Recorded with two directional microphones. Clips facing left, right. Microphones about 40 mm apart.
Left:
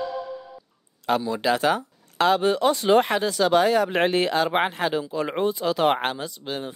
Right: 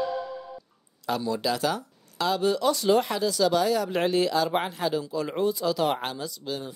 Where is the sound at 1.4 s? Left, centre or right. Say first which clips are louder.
Left 5 dB; left.